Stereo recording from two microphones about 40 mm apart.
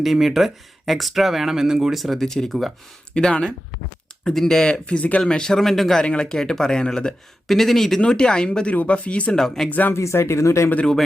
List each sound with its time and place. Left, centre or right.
0.0 s speech: centre
2.0 s speech: centre
2.5 s speech: centre
3.1 s speech: left
4.6 s speech: left
4.9 s speech: left
5.2 s speech: centre
6.0 s speech: left
7.4 s speech: centre
8.0 s speech: left
8.7 s speech: left
9.3 s speech: centre
9.6 s speech: left
9.9 s speech: left